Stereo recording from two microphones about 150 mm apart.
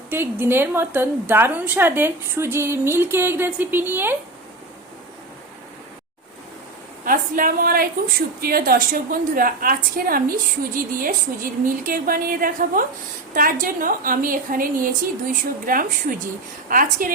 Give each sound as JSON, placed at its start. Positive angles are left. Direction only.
{"t": 0.1, "sound": "a woman's voice", "side_deg": -15}
{"t": 7.0, "sound": "a woman's voice", "side_deg": -70}